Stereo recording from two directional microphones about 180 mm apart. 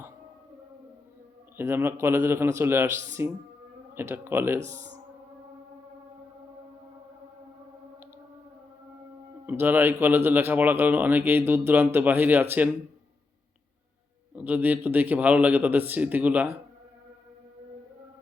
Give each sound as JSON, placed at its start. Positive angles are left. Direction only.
{"t": 1.5, "sound": "speech", "side_deg": -10}
{"t": 4.6, "sound": "speech", "side_deg": -40}
{"t": 9.5, "sound": "speech", "side_deg": -10}
{"t": 14.3, "sound": "speech", "side_deg": -10}